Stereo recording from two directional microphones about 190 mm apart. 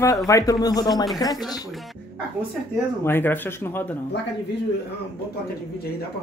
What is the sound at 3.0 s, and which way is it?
Speech, 10° left (ahead or behind).